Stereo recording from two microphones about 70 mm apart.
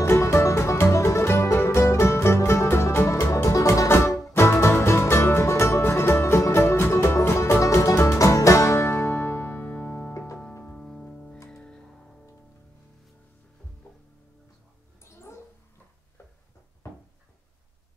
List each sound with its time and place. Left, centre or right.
0.0 s music: left
10.6 s music: centre
15.0 s a sound: left